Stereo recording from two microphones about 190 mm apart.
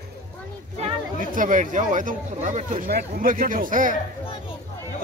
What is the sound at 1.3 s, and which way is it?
Speech, 45° right (ahead or behind).